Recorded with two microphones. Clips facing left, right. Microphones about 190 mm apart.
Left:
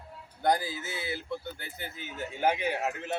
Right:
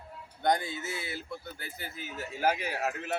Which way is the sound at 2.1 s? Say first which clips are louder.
Left 1 dB; 20° left (ahead or behind).